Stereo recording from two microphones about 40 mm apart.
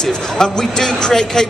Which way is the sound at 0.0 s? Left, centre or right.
Centre.